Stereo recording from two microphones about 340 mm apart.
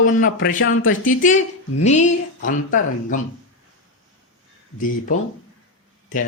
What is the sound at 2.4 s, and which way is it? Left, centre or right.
Speech, left.